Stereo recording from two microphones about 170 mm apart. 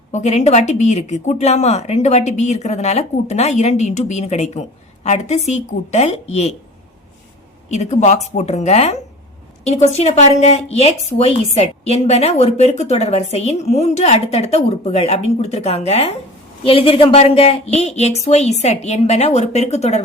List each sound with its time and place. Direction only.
0.1 s a woman's voice: 40° left (ahead or behind)
7.7 s a woman's voice: 40° left (ahead or behind)